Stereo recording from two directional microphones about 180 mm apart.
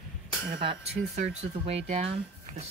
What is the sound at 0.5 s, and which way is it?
Speech, 30° right (ahead or behind).